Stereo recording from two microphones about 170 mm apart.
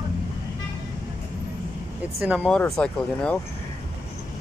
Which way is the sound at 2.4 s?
5° left (ahead or behind).